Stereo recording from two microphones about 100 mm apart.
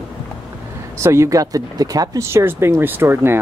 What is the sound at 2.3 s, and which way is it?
Speech, 25° right (ahead or behind).